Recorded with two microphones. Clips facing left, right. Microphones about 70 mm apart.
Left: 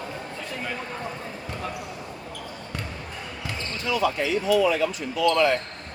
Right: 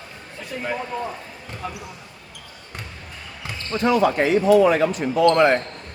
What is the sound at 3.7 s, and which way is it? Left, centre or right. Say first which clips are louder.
Speech: right 7 dB; right.